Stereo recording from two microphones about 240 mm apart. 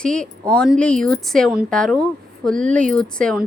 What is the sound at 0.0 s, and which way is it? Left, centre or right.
A woman's voice, centre.